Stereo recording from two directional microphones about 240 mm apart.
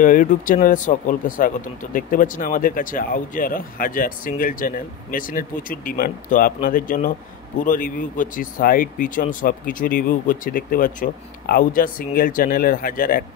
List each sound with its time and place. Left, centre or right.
0.0 s speech: left